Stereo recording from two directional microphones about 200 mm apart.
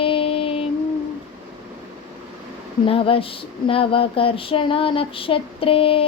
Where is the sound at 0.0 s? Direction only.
25° left (ahead or behind).